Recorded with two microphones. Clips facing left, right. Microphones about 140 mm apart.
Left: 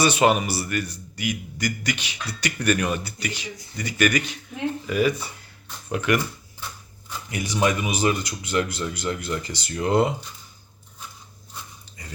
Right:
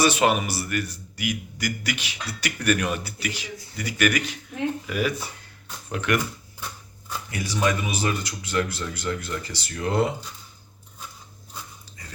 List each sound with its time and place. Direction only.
0.0 s a man's voice: centre (ahead or behind)
7.3 s speech: 20° left (ahead or behind)